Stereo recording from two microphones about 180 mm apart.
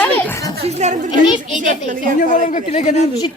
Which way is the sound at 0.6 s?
40° right (ahead or behind).